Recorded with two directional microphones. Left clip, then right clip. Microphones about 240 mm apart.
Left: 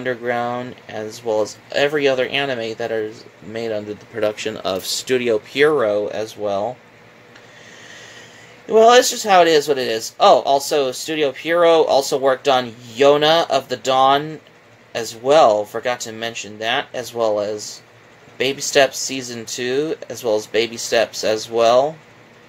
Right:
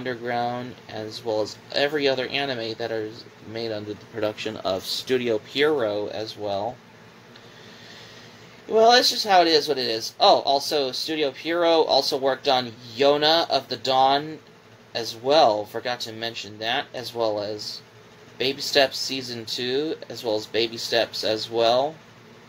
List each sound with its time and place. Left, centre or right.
0.0 s speech: left
8.6 s speech: left